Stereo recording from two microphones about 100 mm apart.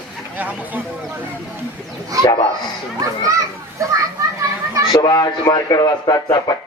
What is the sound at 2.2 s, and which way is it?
Speech, 55° left (ahead or behind).